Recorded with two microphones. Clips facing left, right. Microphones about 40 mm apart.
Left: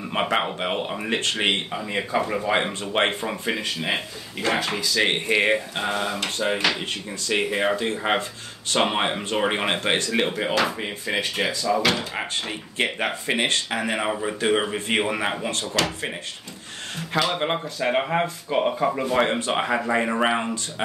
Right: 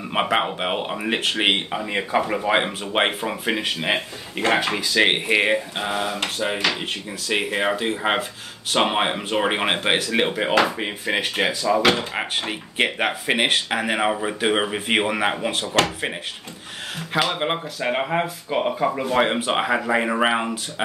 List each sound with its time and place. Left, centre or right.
0.1 s speech: centre
3.5 s speech: right
5.3 s speech: centre
17.3 s speech: centre